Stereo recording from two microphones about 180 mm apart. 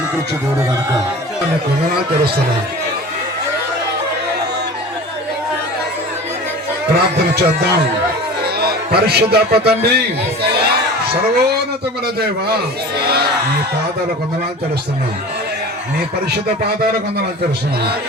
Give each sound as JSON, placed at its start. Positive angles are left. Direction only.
{"t": 6.9, "sound": "speech", "side_deg": -65}
{"t": 10.4, "sound": "crowd", "side_deg": -60}
{"t": 13.0, "sound": "crowd", "side_deg": -60}